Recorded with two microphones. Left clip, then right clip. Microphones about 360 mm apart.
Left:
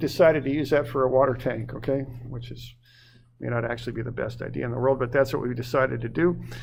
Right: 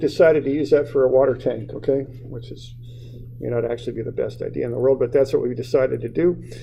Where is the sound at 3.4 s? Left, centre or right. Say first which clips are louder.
Right 5 dB; left.